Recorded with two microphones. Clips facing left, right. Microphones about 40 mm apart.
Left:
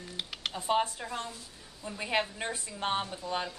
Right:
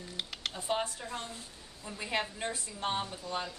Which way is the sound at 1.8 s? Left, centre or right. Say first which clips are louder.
Left 3 dB; centre.